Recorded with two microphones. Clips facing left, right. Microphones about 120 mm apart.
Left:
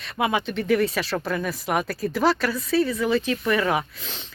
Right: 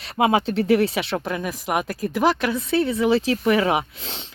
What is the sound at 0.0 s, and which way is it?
Speech, 30° right (ahead or behind).